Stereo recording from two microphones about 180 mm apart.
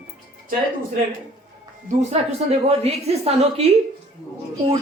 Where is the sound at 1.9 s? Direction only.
40° right (ahead or behind).